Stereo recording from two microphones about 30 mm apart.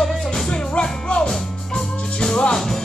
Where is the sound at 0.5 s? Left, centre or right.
Left; by 2.4 s centre.